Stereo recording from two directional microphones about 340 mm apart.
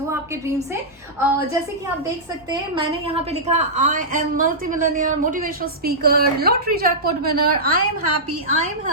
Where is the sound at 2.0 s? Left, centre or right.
Centre.